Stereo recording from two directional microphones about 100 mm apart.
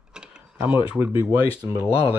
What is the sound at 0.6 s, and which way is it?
Cutlery, 15° right (ahead or behind).